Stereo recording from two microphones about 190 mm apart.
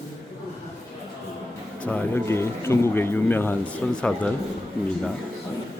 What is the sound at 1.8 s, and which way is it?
Speech, 10° left (ahead or behind).